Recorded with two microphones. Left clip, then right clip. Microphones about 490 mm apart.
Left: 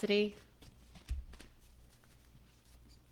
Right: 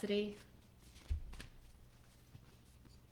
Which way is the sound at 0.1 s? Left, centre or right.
Left.